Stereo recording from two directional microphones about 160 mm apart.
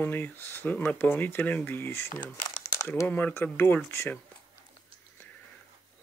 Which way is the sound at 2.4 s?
25° left (ahead or behind).